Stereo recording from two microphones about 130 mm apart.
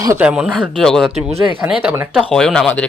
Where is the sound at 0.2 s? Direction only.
10° right (ahead or behind).